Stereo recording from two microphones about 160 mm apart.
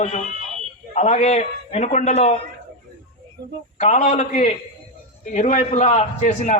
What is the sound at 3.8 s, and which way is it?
A man's voice, 45° left (ahead or behind).